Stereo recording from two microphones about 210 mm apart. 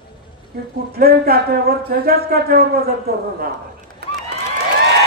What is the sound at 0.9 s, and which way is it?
A man's voice, 45° right (ahead or behind).